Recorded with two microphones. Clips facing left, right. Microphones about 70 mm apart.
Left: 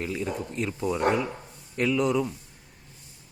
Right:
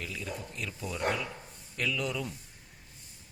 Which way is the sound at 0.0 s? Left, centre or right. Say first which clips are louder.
Left 9 dB; left.